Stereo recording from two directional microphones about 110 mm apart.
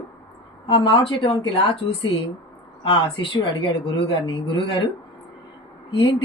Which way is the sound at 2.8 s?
50° left (ahead or behind).